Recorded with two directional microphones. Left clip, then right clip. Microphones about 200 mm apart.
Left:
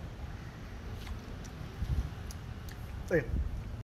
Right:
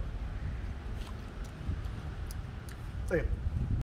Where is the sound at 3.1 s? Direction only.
35° left (ahead or behind).